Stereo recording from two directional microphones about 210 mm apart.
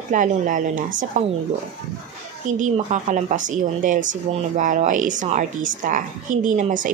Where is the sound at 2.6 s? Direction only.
35° right (ahead or behind).